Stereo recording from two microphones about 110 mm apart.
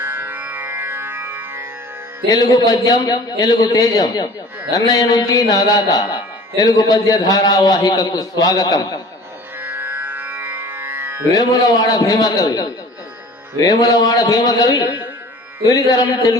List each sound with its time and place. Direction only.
0.0 s music: 20° right (ahead or behind)
2.3 s a man's voice: 35° left (ahead or behind)
9.6 s music: 15° right (ahead or behind)
11.3 s a man's voice: 35° left (ahead or behind)